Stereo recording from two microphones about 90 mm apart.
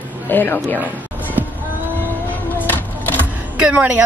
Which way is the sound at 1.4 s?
25° right (ahead or behind).